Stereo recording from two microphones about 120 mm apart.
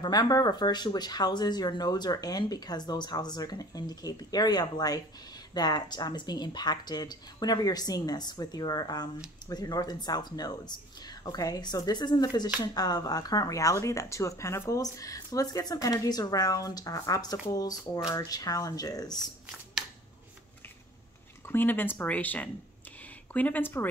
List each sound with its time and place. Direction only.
0.0 s speech: 35° left (ahead or behind)
21.5 s speech: 15° left (ahead or behind)